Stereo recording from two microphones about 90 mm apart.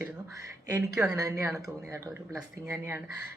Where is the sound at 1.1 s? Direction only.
40° right (ahead or behind).